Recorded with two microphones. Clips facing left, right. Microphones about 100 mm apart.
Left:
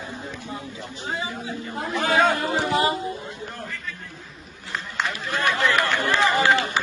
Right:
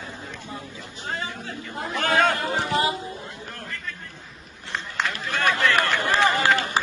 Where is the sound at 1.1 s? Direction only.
15° left (ahead or behind).